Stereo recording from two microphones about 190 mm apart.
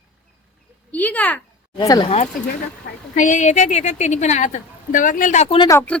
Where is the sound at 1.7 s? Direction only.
20° left (ahead or behind).